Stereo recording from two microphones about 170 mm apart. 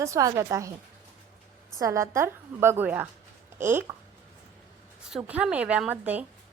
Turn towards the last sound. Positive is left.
turn(degrees=-10)  # may be behind; listen again after turning